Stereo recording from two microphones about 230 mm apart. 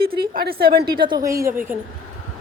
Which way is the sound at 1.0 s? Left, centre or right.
Centre.